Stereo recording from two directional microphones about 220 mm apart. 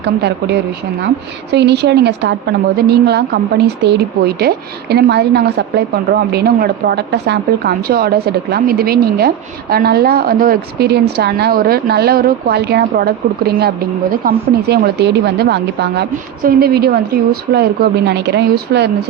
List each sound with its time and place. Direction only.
0.0 s a woman's voice: 50° right (ahead or behind)